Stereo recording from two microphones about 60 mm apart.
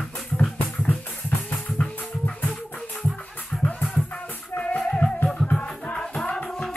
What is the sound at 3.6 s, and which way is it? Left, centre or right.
Music, left.